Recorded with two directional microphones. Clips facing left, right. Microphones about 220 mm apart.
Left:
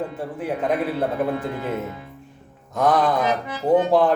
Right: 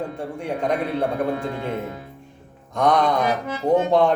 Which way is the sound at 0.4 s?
5° left (ahead or behind).